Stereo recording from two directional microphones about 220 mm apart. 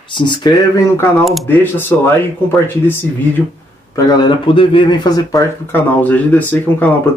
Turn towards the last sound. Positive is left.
turn(degrees=5)  # may be behind; listen again after turning